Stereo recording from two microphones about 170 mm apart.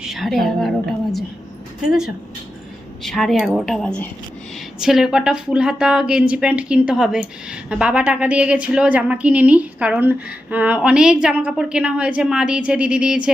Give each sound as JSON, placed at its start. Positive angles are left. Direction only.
{"t": 0.0, "sound": "a woman's voice", "side_deg": 0}